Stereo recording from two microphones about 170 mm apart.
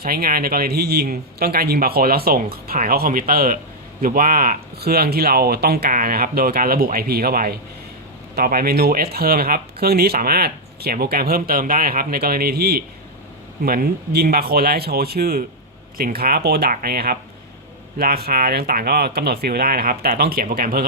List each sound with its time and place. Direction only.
0.0 s speech: 60° right (ahead or behind)